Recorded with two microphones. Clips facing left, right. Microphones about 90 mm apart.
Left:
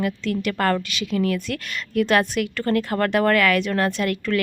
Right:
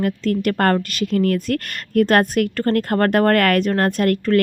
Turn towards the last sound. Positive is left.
turn(degrees=-45)  # may be behind; listen again after turning